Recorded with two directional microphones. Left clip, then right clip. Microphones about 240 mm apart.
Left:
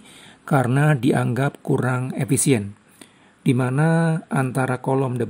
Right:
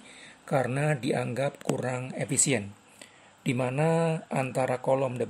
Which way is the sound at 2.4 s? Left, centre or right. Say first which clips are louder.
Left 5 dB; left.